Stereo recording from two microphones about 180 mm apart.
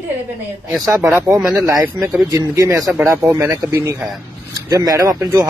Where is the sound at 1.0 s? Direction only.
Centre (ahead or behind); by 2.8 s 20° right (ahead or behind).